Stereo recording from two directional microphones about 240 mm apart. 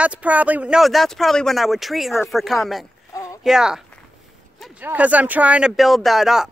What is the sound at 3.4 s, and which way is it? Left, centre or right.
Speech, centre.